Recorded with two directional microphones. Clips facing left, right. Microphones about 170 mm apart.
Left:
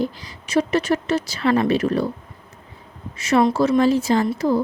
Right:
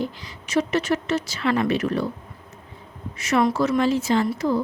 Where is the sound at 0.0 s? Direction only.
35° left (ahead or behind).